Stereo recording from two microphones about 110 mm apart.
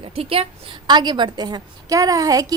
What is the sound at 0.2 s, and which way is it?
Speech, 60° right (ahead or behind).